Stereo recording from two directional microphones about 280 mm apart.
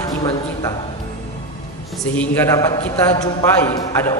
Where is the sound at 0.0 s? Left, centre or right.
Centre.